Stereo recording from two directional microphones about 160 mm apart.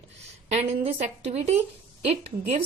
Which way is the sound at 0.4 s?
45° right (ahead or behind).